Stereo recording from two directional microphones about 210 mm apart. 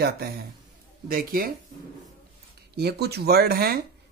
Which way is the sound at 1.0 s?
45° right (ahead or behind).